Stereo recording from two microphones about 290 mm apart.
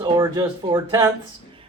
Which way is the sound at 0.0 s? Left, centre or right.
Centre.